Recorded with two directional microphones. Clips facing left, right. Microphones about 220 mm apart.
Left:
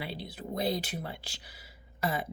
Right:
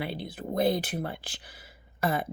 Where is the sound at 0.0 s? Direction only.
55° right (ahead or behind).